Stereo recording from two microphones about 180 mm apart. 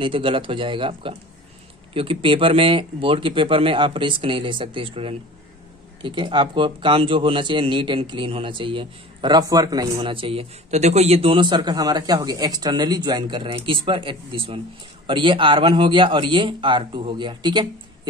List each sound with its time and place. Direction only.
0.0 s a man's voice: 30° right (ahead or behind)